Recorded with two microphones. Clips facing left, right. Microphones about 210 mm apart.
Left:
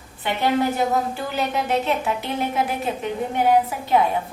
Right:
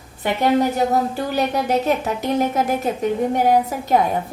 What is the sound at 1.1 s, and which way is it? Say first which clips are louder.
A woman's voice: right 4 dB; 40° right (ahead or behind).